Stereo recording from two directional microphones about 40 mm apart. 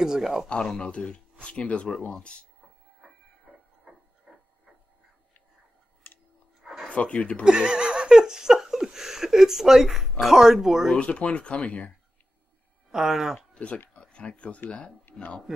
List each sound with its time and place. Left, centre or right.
0.0 s speech: centre
0.5 s speech: left
4.3 s printer: centre
6.9 s speech: left
7.4 s speech: right
11.0 s speech: left
12.9 s speech: centre
13.9 s a sound: left
15.1 s a sound: left